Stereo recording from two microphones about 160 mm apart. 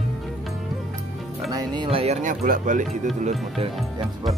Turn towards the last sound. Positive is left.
turn(degrees=-45)  # may be behind; listen again after turning